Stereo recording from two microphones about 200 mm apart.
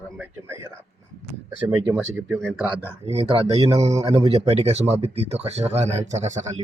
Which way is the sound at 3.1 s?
30° right (ahead or behind).